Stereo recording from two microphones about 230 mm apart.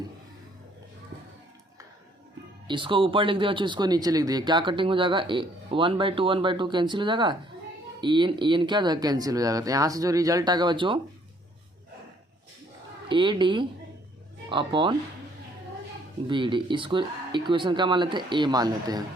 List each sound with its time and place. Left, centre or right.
2.6 s speech: right
13.1 s speech: right
16.2 s speech: right